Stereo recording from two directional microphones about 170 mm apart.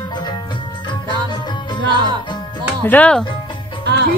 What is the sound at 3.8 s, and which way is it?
Music, 80° right.